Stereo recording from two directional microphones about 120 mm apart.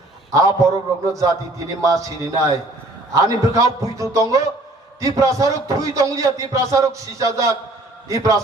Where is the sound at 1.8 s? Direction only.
25° right (ahead or behind).